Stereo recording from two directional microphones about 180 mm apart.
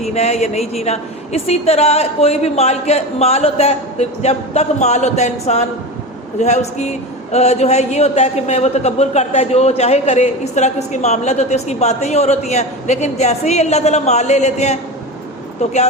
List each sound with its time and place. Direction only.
0.1 s a man's voice: 35° left (ahead or behind)